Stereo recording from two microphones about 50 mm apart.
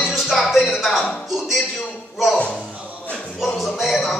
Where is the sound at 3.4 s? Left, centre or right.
Centre.